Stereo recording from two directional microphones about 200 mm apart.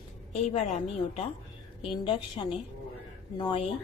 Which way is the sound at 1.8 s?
25° left (ahead or behind).